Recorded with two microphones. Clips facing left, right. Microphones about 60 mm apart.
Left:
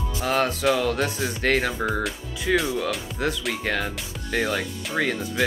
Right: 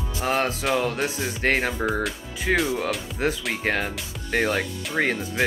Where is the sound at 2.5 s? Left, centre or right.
Right.